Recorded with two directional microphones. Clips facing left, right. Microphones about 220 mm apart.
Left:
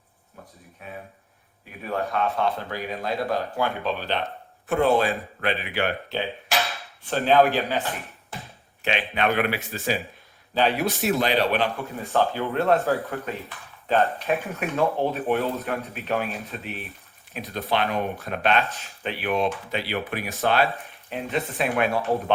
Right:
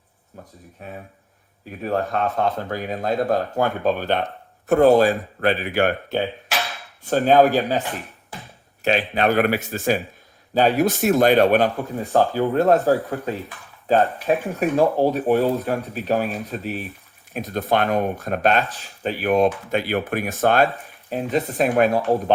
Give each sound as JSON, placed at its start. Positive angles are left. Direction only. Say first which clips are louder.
{"t": 0.8, "sound": "speech", "louder": "right 3 dB", "side_deg": -40}
{"t": 8.8, "sound": "speech", "louder": "right 5 dB", "side_deg": -40}
{"t": 14.3, "sound": "speech", "louder": "right 6 dB", "side_deg": -30}